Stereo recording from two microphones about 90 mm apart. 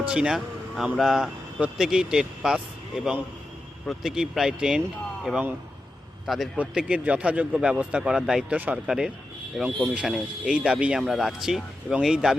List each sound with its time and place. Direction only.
0.1 s a man's voice: 5° right (ahead or behind)
6.6 s speech: 10° right (ahead or behind)
8.5 s speech: 15° right (ahead or behind)